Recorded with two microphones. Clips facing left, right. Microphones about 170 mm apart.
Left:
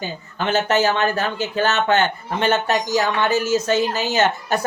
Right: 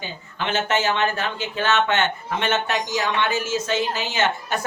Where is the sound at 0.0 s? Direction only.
40° left (ahead or behind).